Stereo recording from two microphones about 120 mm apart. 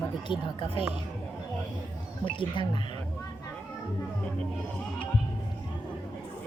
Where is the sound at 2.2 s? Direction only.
45° left (ahead or behind).